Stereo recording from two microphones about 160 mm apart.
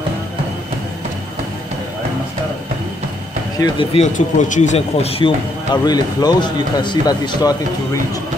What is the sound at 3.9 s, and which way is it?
Speech, 45° left (ahead or behind).